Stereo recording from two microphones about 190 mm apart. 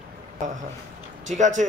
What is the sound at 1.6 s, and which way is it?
Speech, 40° right (ahead or behind).